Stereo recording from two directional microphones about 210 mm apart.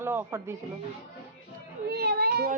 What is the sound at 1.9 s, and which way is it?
Child singing, 50° right (ahead or behind).